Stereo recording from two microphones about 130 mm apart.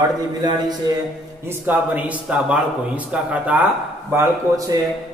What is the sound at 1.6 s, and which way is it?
A man's voice, 15° right (ahead or behind).